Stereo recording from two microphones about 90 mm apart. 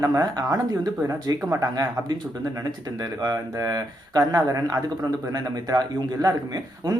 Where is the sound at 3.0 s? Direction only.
45° right (ahead or behind).